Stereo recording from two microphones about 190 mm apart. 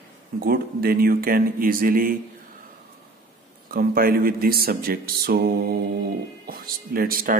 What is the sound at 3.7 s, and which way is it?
A man's voice, 50° right (ahead or behind).